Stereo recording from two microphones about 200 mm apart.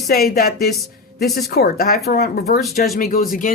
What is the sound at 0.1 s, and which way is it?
Speech, 50° left (ahead or behind).